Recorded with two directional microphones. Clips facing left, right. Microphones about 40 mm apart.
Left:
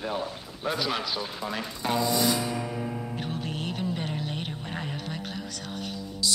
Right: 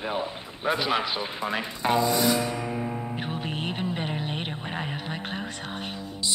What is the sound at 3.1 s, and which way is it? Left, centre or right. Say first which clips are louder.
Music: right 2 dB; right.